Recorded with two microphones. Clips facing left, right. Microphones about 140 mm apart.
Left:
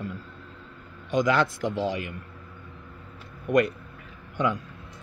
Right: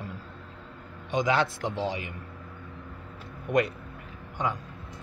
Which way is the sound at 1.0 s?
45° left (ahead or behind).